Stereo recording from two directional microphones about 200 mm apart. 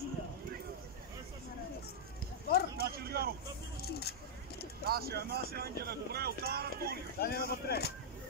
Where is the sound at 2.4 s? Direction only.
50° left (ahead or behind).